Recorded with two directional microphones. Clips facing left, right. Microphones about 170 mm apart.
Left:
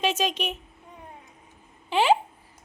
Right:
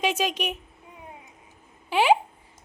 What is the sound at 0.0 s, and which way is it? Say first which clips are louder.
Speech: even; 10° right (ahead or behind).